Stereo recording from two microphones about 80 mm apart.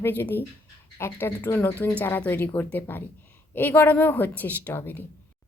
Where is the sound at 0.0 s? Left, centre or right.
Left.